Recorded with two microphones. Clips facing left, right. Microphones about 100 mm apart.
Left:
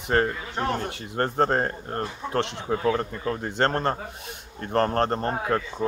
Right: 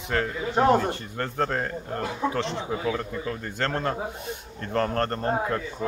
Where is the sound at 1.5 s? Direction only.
45° left (ahead or behind).